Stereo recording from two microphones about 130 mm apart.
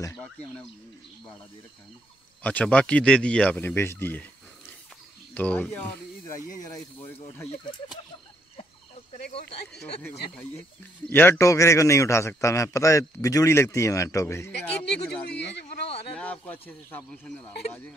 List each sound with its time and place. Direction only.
2.4 s speech: 10° left (ahead or behind)
9.1 s speech: 50° left (ahead or behind)
9.7 s speech: 5° left (ahead or behind)
11.1 s a man's voice: 15° left (ahead or behind)
14.7 s speech: 10° left (ahead or behind)